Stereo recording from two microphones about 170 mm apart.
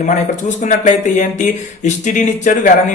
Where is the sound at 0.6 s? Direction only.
45° left (ahead or behind).